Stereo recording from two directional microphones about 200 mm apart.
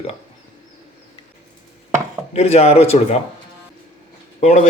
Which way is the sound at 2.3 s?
30° left (ahead or behind).